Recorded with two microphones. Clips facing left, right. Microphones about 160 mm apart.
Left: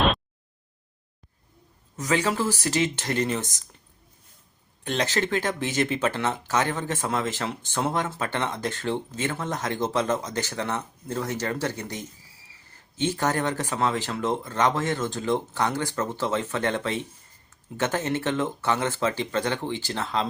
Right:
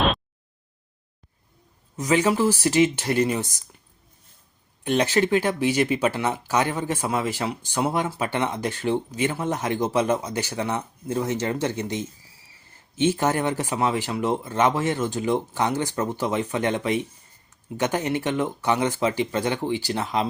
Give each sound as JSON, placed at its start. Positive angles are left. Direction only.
{"t": 2.0, "sound": "speech", "side_deg": -15}
{"t": 4.8, "sound": "speech", "side_deg": -15}